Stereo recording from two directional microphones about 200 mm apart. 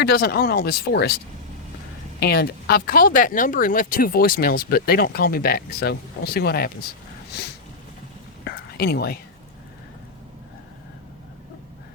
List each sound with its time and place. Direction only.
0.0 s speech: 50° left (ahead or behind)
2.2 s speech: 50° left (ahead or behind)
8.4 s whispering: 50° left (ahead or behind)